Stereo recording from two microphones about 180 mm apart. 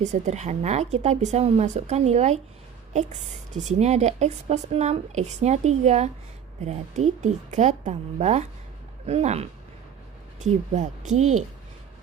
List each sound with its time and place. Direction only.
0.0 s speech: 40° right (ahead or behind)